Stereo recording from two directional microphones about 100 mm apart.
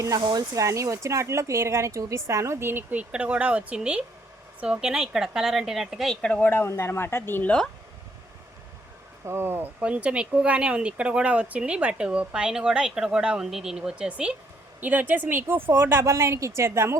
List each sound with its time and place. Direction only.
0.2 s speech: 45° right (ahead or behind)
0.5 s a woman's voice: 30° right (ahead or behind); by 6.1 s centre (ahead or behind)
6.2 s speech: 15° left (ahead or behind)
9.2 s speech: 25° right (ahead or behind)
9.8 s speech: 10° right (ahead or behind)